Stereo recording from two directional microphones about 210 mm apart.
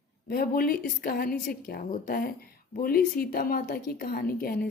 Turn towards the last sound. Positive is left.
turn(degrees=45)  # may be behind; listen again after turning